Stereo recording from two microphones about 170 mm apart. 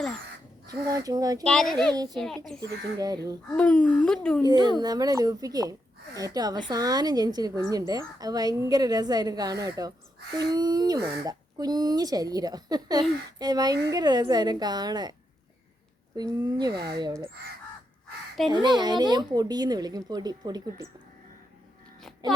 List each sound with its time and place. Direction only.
0.7 s speech: 20° right (ahead or behind)
1.5 s speech: 5° left (ahead or behind)
2.6 s speech: 20° right (ahead or behind)
3.5 s speech: 10° left (ahead or behind)
4.4 s speech: 25° right (ahead or behind)
16.1 s speech: 25° right (ahead or behind)
18.5 s speech: 25° right (ahead or behind)